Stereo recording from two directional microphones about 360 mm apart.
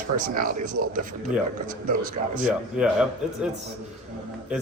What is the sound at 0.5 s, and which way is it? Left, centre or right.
Speech, right.